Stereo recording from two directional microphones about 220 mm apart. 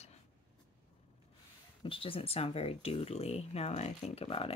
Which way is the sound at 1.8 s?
25° left (ahead or behind).